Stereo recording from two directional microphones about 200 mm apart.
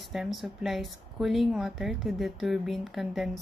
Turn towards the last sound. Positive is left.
turn(degrees=0)  # may be behind; listen again after turning